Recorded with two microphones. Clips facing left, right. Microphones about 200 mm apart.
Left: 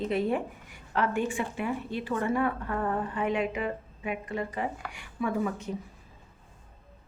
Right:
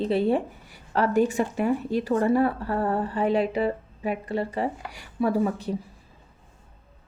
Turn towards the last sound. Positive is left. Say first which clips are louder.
# right 6 dB
turn(degrees=-35)  # may be behind; listen again after turning